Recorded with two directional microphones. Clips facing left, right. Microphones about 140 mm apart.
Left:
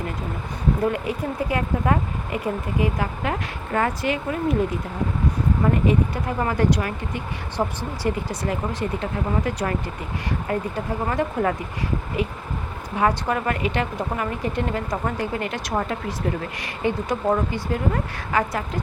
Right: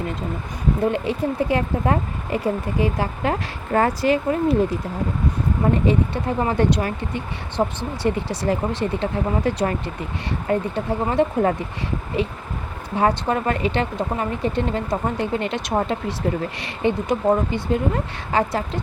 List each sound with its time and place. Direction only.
0.9 s speech: 25° right (ahead or behind)
5.8 s speech: 30° right (ahead or behind)
13.0 s speech: 30° right (ahead or behind)